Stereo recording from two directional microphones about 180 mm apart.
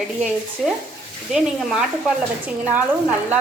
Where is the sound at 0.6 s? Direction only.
5° left (ahead or behind).